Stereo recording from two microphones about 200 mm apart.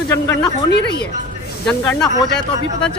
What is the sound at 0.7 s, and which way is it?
Speech, 55° left (ahead or behind).